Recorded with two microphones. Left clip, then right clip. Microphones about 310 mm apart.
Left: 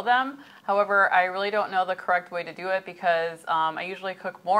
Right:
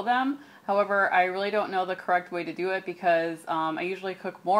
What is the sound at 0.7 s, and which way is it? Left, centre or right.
Speech, left.